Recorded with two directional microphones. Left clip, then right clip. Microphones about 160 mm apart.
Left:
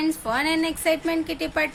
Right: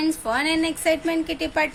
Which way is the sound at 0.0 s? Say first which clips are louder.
Right 1 dB; 5° right (ahead or behind).